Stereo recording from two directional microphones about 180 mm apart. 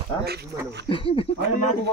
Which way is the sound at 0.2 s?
65° right (ahead or behind).